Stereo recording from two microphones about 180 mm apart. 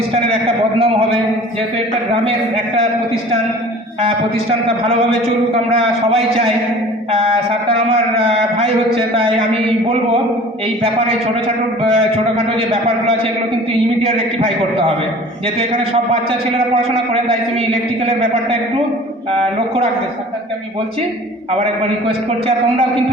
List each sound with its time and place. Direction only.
0.1 s a man's voice: 35° right (ahead or behind)
5.7 s a man's voice: 35° right (ahead or behind)
7.7 s a man's voice: 30° right (ahead or behind)
11.9 s a man's voice: 35° right (ahead or behind)